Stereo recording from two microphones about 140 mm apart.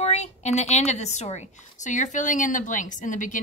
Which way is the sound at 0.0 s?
50° left (ahead or behind).